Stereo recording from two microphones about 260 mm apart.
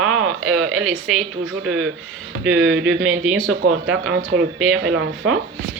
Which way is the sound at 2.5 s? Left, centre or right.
Right.